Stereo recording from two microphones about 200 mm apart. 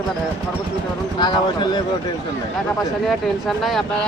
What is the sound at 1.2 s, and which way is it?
Speech, 20° left (ahead or behind).